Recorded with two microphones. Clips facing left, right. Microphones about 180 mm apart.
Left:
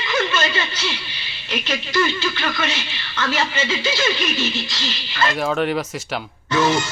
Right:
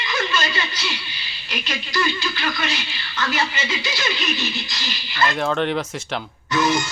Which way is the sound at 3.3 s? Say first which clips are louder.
Left 4 dB; 25° left (ahead or behind).